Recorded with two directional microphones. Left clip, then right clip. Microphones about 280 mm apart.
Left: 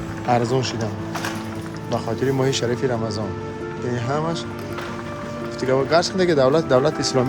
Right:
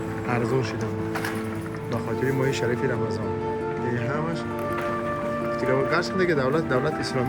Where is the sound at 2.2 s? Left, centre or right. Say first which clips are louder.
Left 3 dB; centre.